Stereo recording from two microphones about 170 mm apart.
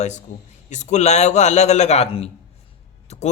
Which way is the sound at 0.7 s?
45° left (ahead or behind).